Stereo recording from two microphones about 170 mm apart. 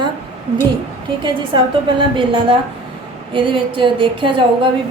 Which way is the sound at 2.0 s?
30° right (ahead or behind).